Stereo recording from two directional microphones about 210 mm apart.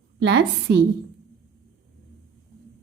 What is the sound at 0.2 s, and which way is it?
Speech, 55° right (ahead or behind).